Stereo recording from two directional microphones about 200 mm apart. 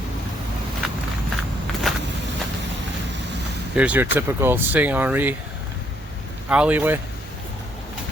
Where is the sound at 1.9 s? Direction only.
Centre (ahead or behind).